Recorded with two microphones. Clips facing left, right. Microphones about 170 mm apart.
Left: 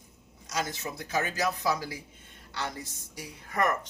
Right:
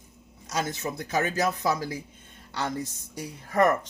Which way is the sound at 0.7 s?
50° right (ahead or behind).